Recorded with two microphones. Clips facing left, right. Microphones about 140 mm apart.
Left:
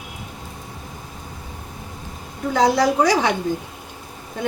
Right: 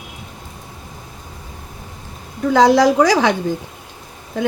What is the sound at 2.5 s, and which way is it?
Speech, 90° right.